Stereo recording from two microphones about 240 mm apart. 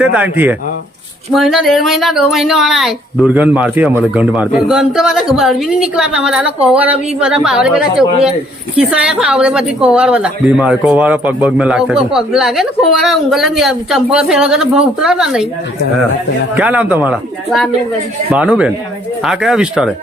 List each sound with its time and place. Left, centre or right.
0.0 s speech: centre
16.6 s speech: centre